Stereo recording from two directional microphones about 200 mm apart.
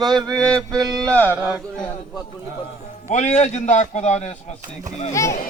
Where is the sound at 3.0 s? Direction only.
35° left (ahead or behind).